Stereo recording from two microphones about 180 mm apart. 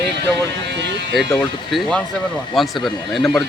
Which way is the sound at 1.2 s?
Centre (ahead or behind).